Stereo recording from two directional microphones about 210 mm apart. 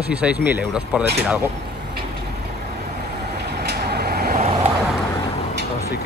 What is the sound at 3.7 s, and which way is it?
Vehicle, 50° right (ahead or behind).